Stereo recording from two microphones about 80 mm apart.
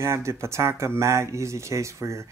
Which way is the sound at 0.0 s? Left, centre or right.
Right.